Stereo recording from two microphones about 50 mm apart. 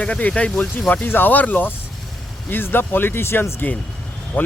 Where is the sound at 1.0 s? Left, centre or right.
Left.